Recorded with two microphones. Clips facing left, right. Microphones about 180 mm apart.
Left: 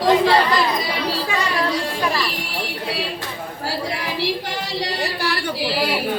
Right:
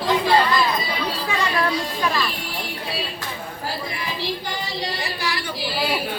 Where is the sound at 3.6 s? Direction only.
75° left (ahead or behind).